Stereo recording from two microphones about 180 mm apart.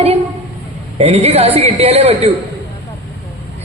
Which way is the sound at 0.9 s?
35° right (ahead or behind).